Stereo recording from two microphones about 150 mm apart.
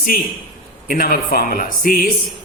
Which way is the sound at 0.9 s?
75° left (ahead or behind).